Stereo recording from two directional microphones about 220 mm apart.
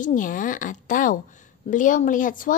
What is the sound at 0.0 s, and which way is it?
Speech, 35° left (ahead or behind).